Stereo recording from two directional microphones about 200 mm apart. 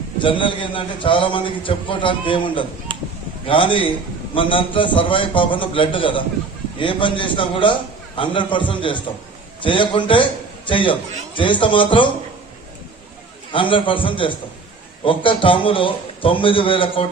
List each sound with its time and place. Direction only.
0.2 s a man's voice: 25° left (ahead or behind)
2.9 s chop: 25° right (ahead or behind)
3.4 s a man's voice: 25° left (ahead or behind)
13.5 s a man's voice: 25° left (ahead or behind)